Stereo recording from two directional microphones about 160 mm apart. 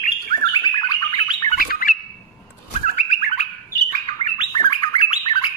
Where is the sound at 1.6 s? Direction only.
65° left (ahead or behind).